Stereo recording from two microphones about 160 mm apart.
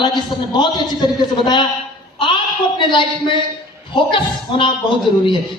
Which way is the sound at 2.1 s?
30° left (ahead or behind).